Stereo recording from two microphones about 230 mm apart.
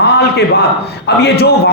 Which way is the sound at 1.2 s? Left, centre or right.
Left.